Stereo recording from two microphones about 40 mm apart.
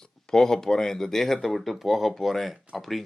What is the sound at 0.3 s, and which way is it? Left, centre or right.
Speech, centre.